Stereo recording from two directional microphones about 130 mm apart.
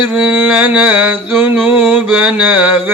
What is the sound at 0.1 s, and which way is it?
Mantra, 10° right (ahead or behind).